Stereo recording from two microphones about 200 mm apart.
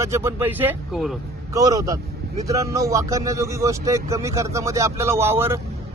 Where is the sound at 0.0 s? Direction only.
15° right (ahead or behind).